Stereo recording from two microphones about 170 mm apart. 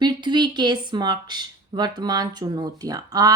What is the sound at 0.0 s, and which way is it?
A woman's voice, 25° right (ahead or behind).